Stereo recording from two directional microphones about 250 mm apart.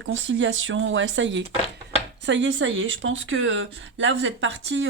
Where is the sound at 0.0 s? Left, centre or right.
Right.